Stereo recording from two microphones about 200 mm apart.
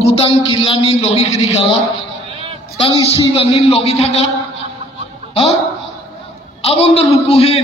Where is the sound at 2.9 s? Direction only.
15° right (ahead or behind).